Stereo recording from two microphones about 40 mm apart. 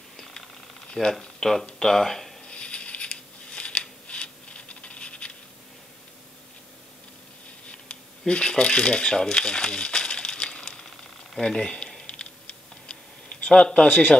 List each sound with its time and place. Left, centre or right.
1.0 s speech: centre
2.4 s scissors: left
7.6 s a sound: left
8.3 s speech: left
12.1 s computer keyboard: left